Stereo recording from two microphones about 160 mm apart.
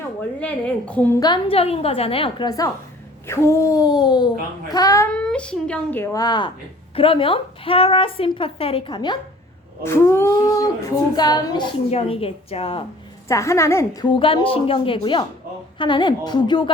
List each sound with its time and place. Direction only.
0.3 s a child's voice: 10° left (ahead or behind)
1.2 s a woman's voice: 35° left (ahead or behind)
5.1 s a child's voice: 5° left (ahead or behind); by 9.1 s 30° left (ahead or behind)
9.8 s speech: 15° left (ahead or behind)
11.9 s a woman's voice: 40° left (ahead or behind)
13.2 s a child's voice: 20° left (ahead or behind)
14.1 s a woman's voice: 30° left (ahead or behind)